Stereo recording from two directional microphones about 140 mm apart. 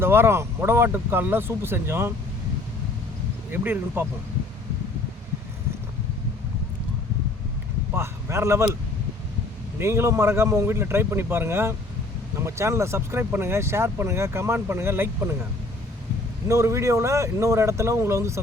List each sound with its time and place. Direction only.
0.0 s speech: 15° right (ahead or behind)
3.5 s speech: 15° right (ahead or behind)
7.9 s speech: 20° right (ahead or behind)
9.7 s speech: 20° right (ahead or behind)
16.5 s speech: 20° right (ahead or behind)